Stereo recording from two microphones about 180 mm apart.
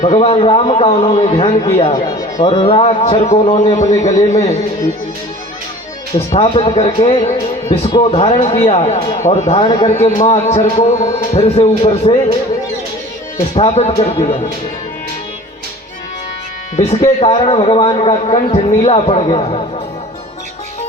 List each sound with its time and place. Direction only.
0.0 s speech: 40° left (ahead or behind)
6.1 s speech: 30° left (ahead or behind)
13.6 s speech: 35° left (ahead or behind)
16.7 s speech: 35° left (ahead or behind)